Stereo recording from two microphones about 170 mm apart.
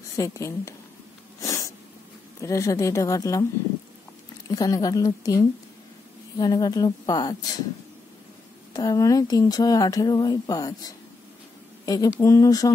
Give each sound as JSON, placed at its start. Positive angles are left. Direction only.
{"t": 0.1, "sound": "speech", "side_deg": 20}
{"t": 1.4, "sound": "sneeze", "side_deg": 20}
{"t": 2.4, "sound": "speech", "side_deg": 20}
{"t": 4.5, "sound": "speech", "side_deg": 20}
{"t": 8.7, "sound": "speech", "side_deg": 20}